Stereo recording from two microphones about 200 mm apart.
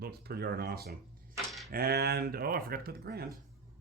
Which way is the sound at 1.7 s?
50° right (ahead or behind).